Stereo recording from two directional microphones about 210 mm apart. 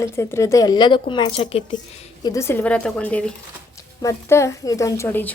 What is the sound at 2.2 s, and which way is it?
A woman's voice, 15° left (ahead or behind).